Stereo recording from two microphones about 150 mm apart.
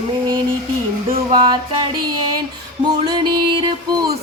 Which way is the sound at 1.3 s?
30° right (ahead or behind).